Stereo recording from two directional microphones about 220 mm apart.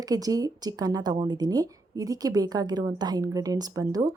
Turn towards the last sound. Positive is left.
turn(degrees=-15)  # may be behind; listen again after turning